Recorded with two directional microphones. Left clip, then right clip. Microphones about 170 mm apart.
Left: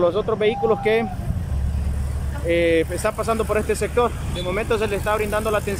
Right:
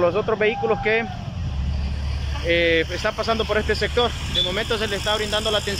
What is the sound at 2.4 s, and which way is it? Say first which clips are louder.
Speech: even; 20° left (ahead or behind).